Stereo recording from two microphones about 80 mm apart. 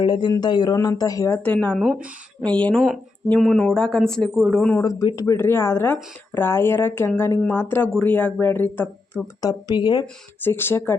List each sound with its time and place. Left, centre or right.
0.0 s speech: left
1.4 s speech: centre
4.8 s speech: left
5.2 s speech: left
9.4 s speech: left
10.4 s speech: left